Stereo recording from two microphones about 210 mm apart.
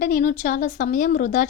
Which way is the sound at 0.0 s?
40° left (ahead or behind).